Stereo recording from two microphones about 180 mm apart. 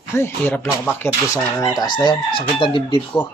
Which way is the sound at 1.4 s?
15° left (ahead or behind).